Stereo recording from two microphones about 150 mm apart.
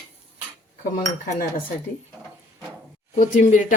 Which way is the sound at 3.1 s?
55° left (ahead or behind).